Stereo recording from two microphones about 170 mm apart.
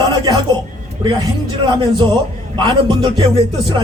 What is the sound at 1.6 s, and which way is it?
Music, 25° right (ahead or behind).